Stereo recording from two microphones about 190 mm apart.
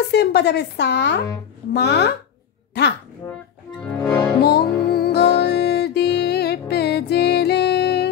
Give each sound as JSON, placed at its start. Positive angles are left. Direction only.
{"t": 0.1, "sound": "speech", "side_deg": 60}
{"t": 3.2, "sound": "speech", "side_deg": 15}
{"t": 4.0, "sound": "music", "side_deg": 20}
{"t": 4.4, "sound": "music", "side_deg": 55}